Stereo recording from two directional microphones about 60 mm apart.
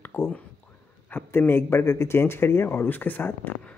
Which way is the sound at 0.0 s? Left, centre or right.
Left.